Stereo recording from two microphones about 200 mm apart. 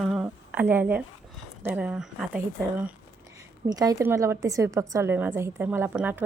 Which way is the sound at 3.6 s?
20° right (ahead or behind).